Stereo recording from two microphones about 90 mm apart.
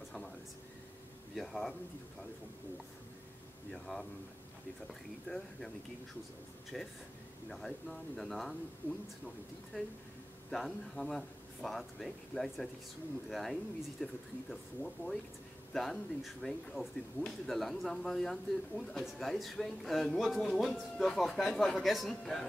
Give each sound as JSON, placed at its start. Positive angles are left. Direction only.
{"t": 1.3, "sound": "speech", "side_deg": 5}
{"t": 3.7, "sound": "speech", "side_deg": 5}
{"t": 5.3, "sound": "speech", "side_deg": 15}
{"t": 6.7, "sound": "speech", "side_deg": 5}
{"t": 10.5, "sound": "speech", "side_deg": 5}